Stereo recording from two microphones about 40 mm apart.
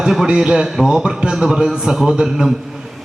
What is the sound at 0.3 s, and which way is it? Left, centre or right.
A man's voice, right.